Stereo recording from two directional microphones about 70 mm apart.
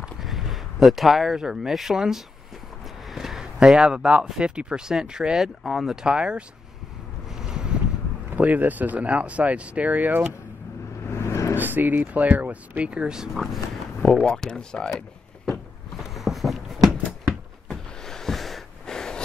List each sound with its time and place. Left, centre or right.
0.2 s speech: centre
3.1 s a sound: centre
4.4 s speech: centre
7.4 s a sound: centre
8.3 s speech: right
11.1 s vehicle: left
11.5 s speech: right; by 13.5 s centre
14.0 s speech: centre
16.0 s a sound: centre